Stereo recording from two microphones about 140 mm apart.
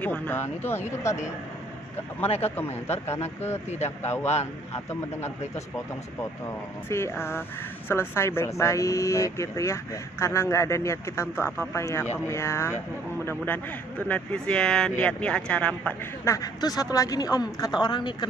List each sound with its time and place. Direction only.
0.0 s speech: 15° left (ahead or behind)
2.2 s a man's voice: 45° left (ahead or behind)
4.0 s speech: 20° left (ahead or behind)
6.9 s speech: 20° left (ahead or behind)
16.3 s speech: 25° left (ahead or behind)